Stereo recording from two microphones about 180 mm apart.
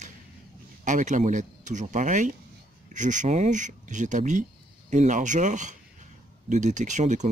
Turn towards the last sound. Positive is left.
turn(degrees=-40)  # may be behind; listen again after turning